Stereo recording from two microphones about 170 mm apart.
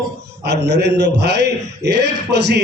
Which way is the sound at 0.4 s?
80° right.